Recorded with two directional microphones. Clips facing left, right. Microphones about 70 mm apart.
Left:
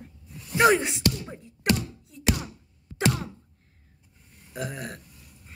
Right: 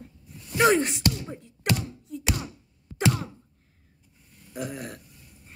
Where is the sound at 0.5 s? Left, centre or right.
Centre.